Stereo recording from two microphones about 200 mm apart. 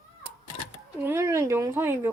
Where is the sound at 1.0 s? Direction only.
10° right (ahead or behind).